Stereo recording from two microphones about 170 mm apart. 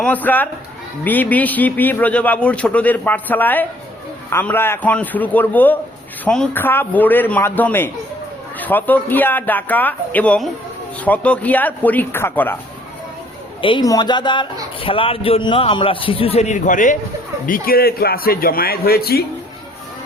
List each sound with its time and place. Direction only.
0.0 s speech: 10° left (ahead or behind)
13.6 s a man's voice: 30° left (ahead or behind); by 19.2 s 65° left (ahead or behind)